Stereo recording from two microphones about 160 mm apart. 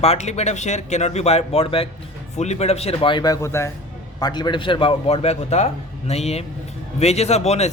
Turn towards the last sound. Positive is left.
turn(degrees=45)  # may be behind; listen again after turning